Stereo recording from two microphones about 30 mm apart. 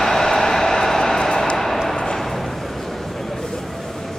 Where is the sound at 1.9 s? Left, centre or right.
Left.